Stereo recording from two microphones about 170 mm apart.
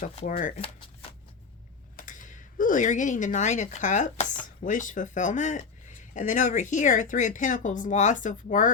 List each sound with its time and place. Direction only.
0.0 s speech: 45° left (ahead or behind)
2.0 s speech: 50° left (ahead or behind)